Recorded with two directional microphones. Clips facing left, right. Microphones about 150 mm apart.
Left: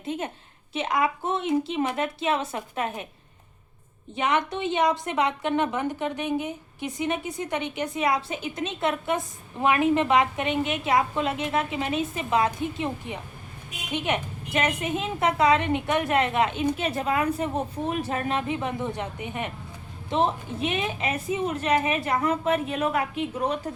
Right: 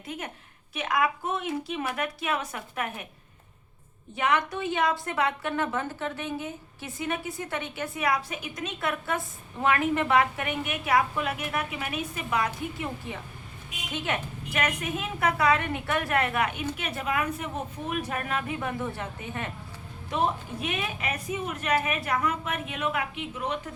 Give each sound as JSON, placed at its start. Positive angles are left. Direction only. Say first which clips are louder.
{"t": 0.0, "sound": "a woman's voice", "louder": "left 6 dB", "side_deg": 25}
{"t": 4.1, "sound": "a woman's voice", "louder": "left 1 dB", "side_deg": 20}